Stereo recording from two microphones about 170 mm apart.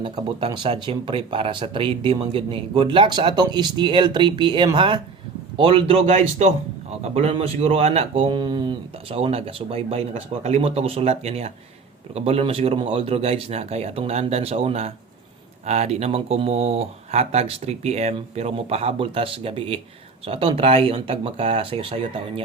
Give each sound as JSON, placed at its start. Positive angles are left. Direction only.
{"t": 0.0, "sound": "speech", "side_deg": -30}